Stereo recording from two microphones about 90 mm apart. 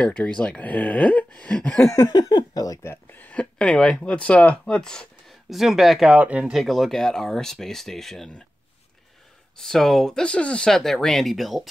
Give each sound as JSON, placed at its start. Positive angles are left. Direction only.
{"t": 0.0, "sound": "speech", "side_deg": 15}
{"t": 1.9, "sound": "a sound", "side_deg": 35}
{"t": 2.1, "sound": "speech", "side_deg": 50}
{"t": 2.9, "sound": "speech", "side_deg": 20}
{"t": 5.5, "sound": "speech", "side_deg": 0}
{"t": 6.1, "sound": "speech", "side_deg": -15}
{"t": 6.5, "sound": "speech", "side_deg": 0}
{"t": 9.6, "sound": "speech", "side_deg": 5}